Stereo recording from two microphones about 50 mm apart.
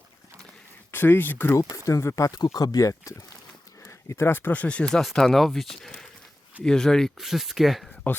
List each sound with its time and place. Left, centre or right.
0.9 s speech: left
1.7 s speech: left
4.3 s speech: left
5.0 s speech: centre
7.2 s speech: centre
8.1 s speech: left